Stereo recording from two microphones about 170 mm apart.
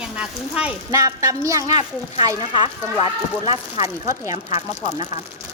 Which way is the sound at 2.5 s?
30° left (ahead or behind).